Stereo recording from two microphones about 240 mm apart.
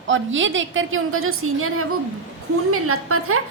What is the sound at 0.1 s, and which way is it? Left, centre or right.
A woman's voice, right.